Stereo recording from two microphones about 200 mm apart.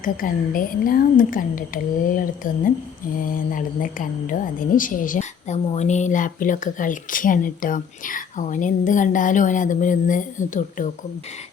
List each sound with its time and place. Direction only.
0.0 s a woman's voice: 45° left (ahead or behind)